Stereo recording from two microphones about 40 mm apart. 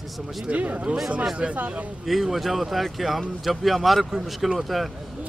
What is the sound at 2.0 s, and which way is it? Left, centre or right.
Speech, centre.